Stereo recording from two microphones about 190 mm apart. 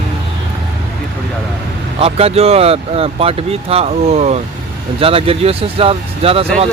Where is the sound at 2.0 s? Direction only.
30° right (ahead or behind).